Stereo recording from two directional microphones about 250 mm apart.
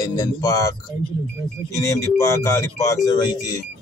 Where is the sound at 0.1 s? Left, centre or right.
Centre.